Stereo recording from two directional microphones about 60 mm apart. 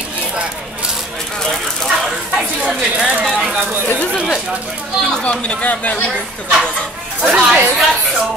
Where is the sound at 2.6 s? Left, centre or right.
Centre.